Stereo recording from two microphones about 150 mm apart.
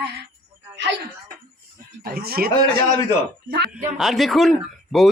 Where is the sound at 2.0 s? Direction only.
85° right.